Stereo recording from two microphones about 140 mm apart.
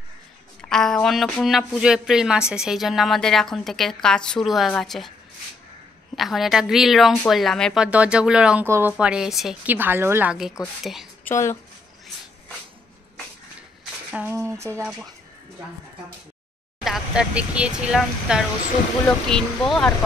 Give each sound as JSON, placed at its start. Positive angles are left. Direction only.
{"t": 0.6, "sound": "speech", "side_deg": 5}
{"t": 6.1, "sound": "speech", "side_deg": 0}
{"t": 7.8, "sound": "speech", "side_deg": -10}
{"t": 8.6, "sound": "speech", "side_deg": -20}
{"t": 8.9, "sound": "speech", "side_deg": -5}
{"t": 9.8, "sound": "speech", "side_deg": -15}
{"t": 11.2, "sound": "speech", "side_deg": 20}
{"t": 14.1, "sound": "speech", "side_deg": -10}
{"t": 16.8, "sound": "speech", "side_deg": -5}
{"t": 19.0, "sound": "speech", "side_deg": 5}